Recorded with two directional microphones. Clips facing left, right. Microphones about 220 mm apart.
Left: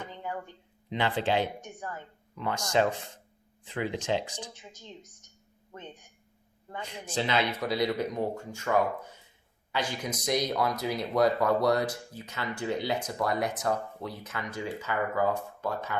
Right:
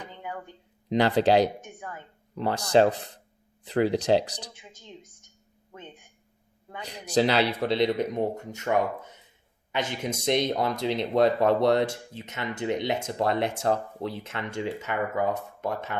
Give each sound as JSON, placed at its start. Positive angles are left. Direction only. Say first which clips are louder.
{"t": 0.9, "sound": "speech", "louder": "right 7 dB", "side_deg": -40}
{"t": 6.8, "sound": "speech", "louder": "right 9 dB", "side_deg": -40}